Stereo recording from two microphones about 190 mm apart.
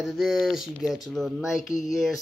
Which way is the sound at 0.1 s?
Centre (ahead or behind).